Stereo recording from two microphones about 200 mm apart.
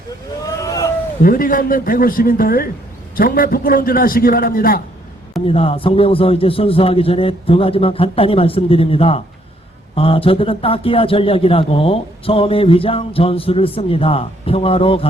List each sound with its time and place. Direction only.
0.6 s a sound: 15° left (ahead or behind)
1.2 s a man's voice: 45° left (ahead or behind)
5.5 s a man's voice: 30° left (ahead or behind)